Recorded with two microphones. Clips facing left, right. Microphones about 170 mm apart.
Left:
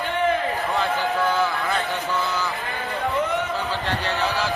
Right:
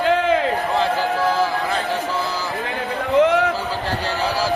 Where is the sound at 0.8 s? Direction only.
30° right (ahead or behind).